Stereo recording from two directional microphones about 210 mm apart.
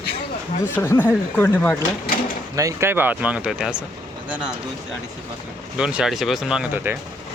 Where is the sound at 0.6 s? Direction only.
10° left (ahead or behind).